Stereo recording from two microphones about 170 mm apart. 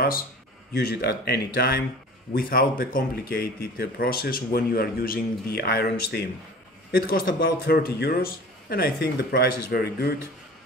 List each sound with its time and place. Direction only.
0.7 s a man's voice: 70° left (ahead or behind)